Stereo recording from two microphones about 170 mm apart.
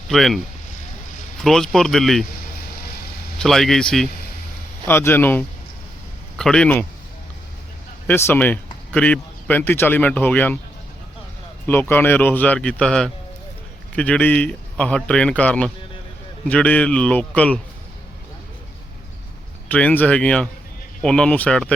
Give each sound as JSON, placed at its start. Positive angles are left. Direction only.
{"t": 0.1, "sound": "speech", "side_deg": 0}
{"t": 1.4, "sound": "speech", "side_deg": 5}
{"t": 3.3, "sound": "speech", "side_deg": 0}
{"t": 4.9, "sound": "speech", "side_deg": 15}
{"t": 8.0, "sound": "speech", "side_deg": 10}
{"t": 11.6, "sound": "speech", "side_deg": 10}
{"t": 19.6, "sound": "speech", "side_deg": 10}